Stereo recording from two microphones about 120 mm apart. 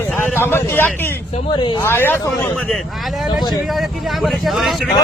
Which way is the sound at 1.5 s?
40° left (ahead or behind).